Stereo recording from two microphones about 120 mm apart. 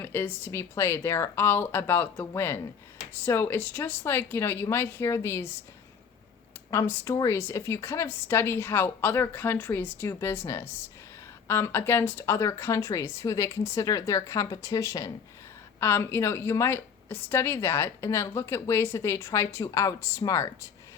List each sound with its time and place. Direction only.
0.0 s a woman's voice: 15° left (ahead or behind)
6.7 s a woman's voice: 20° left (ahead or behind)